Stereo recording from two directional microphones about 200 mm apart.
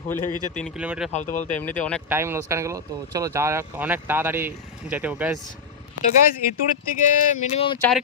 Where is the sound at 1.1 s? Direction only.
40° left (ahead or behind).